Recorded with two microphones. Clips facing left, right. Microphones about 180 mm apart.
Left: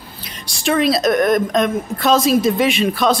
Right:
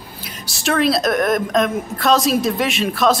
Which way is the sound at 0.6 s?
Centre (ahead or behind).